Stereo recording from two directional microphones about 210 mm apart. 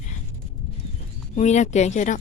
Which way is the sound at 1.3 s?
35° left (ahead or behind).